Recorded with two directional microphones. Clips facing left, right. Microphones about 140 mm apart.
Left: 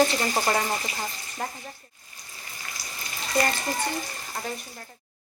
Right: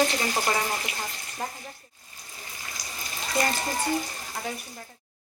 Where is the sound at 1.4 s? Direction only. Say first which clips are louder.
Left 1 dB; centre (ahead or behind).